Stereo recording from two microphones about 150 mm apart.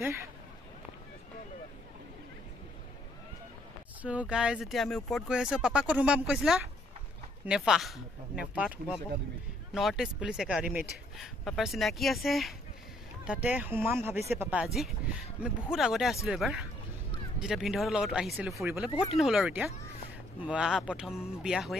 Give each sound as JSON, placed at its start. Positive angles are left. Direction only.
{"t": 0.0, "sound": "speech", "side_deg": -20}
{"t": 4.0, "sound": "speech", "side_deg": -10}